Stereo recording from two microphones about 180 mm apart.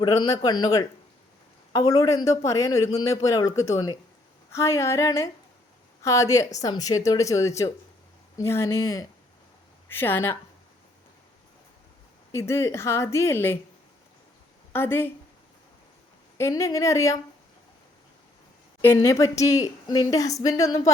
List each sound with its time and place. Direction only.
0.0 s speech: 20° left (ahead or behind)
12.3 s speech: 15° left (ahead or behind)
14.7 s speech: 10° left (ahead or behind)
16.4 s speech: 15° left (ahead or behind)
18.8 s speech: 15° left (ahead or behind)